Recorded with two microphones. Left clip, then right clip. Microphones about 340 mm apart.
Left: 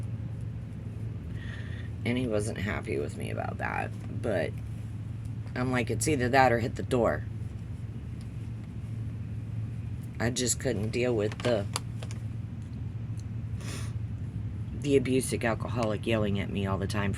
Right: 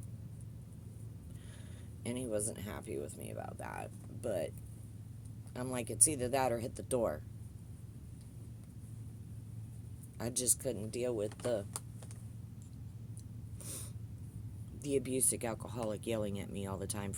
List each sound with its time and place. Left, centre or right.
2.0 s speech: right
5.5 s speech: right
10.2 s speech: right
14.8 s speech: right